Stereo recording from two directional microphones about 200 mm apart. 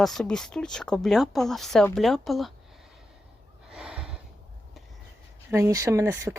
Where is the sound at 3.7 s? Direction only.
5° right (ahead or behind).